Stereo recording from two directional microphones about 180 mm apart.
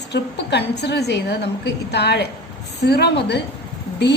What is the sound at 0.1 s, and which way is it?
A woman's voice, 70° left (ahead or behind).